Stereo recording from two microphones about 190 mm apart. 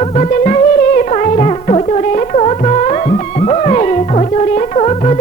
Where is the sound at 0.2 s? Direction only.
40° left (ahead or behind).